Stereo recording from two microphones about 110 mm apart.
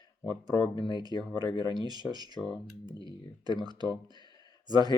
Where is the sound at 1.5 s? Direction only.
40° left (ahead or behind).